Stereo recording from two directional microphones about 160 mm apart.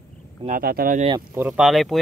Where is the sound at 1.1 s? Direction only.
15° right (ahead or behind).